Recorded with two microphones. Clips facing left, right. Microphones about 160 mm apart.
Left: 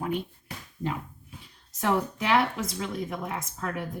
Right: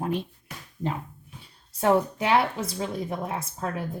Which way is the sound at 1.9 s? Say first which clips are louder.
Right 4 dB; 30° right (ahead or behind).